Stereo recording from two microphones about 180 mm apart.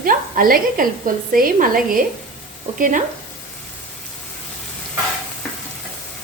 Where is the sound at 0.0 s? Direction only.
50° right (ahead or behind).